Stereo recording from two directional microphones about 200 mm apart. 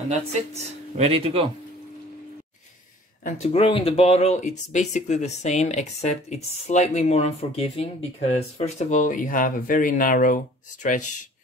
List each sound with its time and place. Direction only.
0.9 s speech: 30° right (ahead or behind)
3.3 s speech: 30° left (ahead or behind)